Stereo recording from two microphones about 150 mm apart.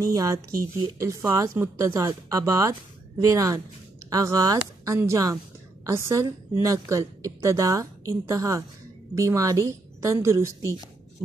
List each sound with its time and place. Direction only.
0.0 s a woman's voice: 25° right (ahead or behind)